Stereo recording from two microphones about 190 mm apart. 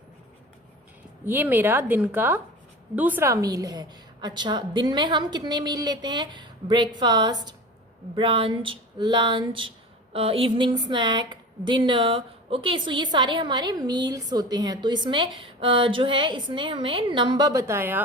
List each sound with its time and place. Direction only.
1.2 s a woman's voice: 10° right (ahead or behind)